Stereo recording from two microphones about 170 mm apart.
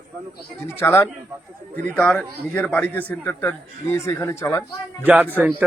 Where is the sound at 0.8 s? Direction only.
15° left (ahead or behind).